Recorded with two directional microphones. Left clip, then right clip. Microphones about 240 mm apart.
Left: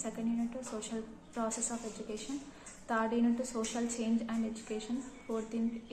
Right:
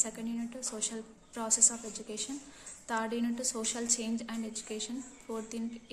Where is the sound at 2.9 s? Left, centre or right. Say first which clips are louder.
Left 2 dB; right.